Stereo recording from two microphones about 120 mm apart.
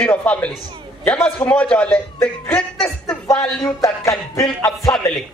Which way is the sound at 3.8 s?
30° left (ahead or behind).